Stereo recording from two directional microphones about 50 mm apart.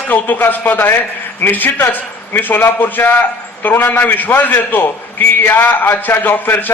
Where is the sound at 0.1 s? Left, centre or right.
Left.